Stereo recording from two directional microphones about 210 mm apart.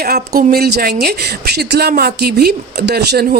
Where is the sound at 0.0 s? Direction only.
45° right (ahead or behind).